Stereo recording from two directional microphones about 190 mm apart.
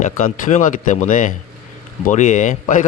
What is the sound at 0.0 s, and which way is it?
A man's voice, 45° left (ahead or behind).